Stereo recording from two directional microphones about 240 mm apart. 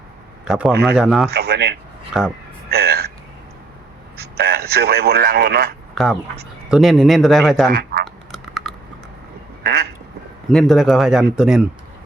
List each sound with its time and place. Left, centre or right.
0.4 s a man's voice: centre
0.7 s speech: right
0.9 s speech: centre
1.3 s speech: right
2.1 s speech: centre
2.6 s a sound: right
4.2 s speech: right
5.9 s speech: centre
7.7 s a sound: right
8.0 s duck: centre
9.6 s quack: right
10.5 s speech: centre